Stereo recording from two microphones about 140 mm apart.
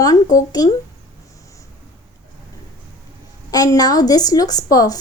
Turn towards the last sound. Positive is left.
turn(degrees=25)  # may be behind; listen again after turning